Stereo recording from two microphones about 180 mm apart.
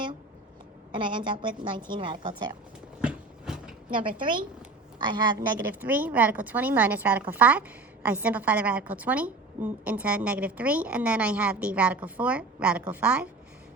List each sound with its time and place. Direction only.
0.9 s a woman's voice: 25° right (ahead or behind)
3.0 s walk: 5° right (ahead or behind)
3.9 s a woman's voice: 30° right (ahead or behind)
5.6 s a woman's voice: 10° right (ahead or behind)